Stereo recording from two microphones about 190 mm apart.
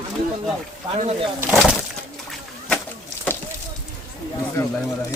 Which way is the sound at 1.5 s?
Centre (ahead or behind).